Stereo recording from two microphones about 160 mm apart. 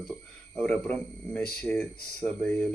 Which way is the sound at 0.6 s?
5° left (ahead or behind).